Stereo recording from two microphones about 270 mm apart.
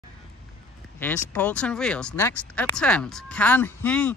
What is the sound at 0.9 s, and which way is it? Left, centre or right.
Speech, centre.